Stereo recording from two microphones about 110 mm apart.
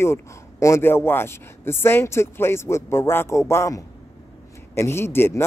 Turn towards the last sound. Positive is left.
turn(degrees=20)  # may be behind; listen again after turning